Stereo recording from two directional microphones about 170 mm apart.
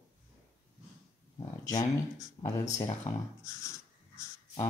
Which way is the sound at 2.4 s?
45° left (ahead or behind).